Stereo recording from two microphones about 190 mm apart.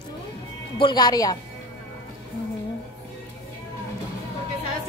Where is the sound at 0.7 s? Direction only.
25° left (ahead or behind).